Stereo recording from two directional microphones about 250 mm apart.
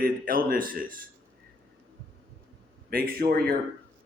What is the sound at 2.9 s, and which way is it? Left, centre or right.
Speech, right.